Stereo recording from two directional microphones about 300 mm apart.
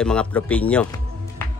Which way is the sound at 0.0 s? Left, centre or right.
Centre.